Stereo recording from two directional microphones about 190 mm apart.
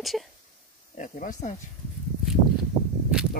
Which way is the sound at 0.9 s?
45° left (ahead or behind).